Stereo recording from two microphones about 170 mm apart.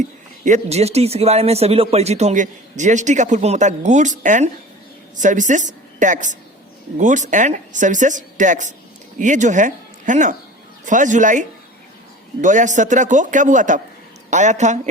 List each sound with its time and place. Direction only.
0.4 s a man's voice: 40° right (ahead or behind)